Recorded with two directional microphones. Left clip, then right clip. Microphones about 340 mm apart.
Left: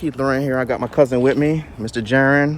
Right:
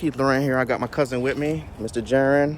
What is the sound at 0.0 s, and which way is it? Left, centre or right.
Speech, centre.